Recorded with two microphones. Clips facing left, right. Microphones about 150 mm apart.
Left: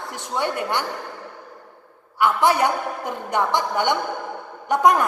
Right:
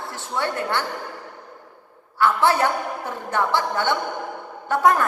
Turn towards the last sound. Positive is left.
turn(degrees=15)  # may be behind; listen again after turning